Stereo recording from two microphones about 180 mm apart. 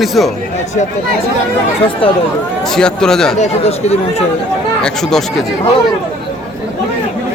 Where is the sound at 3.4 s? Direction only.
35° left (ahead or behind).